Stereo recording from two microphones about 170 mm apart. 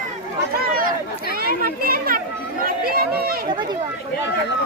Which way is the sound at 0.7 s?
55° right (ahead or behind).